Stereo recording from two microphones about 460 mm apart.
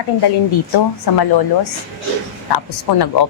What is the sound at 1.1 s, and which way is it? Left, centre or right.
Speech, left.